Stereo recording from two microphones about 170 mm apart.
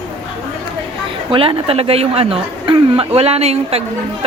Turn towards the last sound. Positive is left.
turn(degrees=-35)  # may be behind; listen again after turning